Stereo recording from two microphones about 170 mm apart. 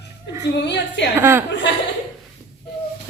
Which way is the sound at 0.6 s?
85° left.